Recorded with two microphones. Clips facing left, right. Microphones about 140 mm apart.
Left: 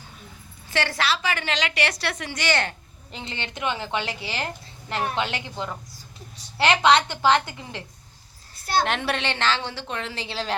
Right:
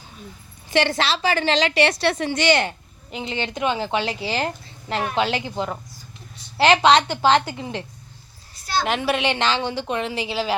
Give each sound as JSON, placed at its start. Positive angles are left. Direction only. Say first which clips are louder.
{"t": 0.7, "sound": "a woman's voice", "louder": "right 5 dB", "side_deg": -20}
{"t": 8.8, "sound": "a woman's voice", "louder": "right 5 dB", "side_deg": -5}